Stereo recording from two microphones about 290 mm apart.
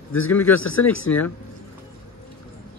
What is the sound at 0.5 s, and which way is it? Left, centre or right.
Speech, left.